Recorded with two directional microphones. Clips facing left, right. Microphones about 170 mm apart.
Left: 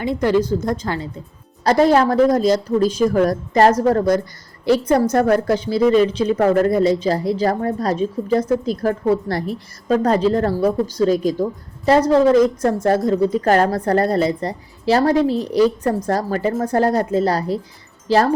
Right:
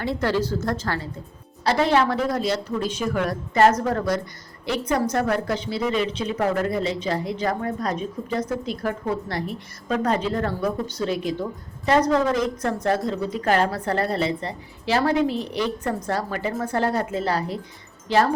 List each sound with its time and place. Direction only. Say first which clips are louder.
0.0 s a woman's voice: left 6 dB; 15° left (ahead or behind)
1.6 s speech: left 6 dB; 40° left (ahead or behind)